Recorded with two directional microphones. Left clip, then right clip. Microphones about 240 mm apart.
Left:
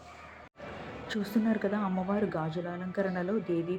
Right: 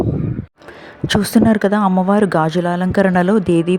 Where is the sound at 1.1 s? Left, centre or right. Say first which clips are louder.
Right 17 dB; right.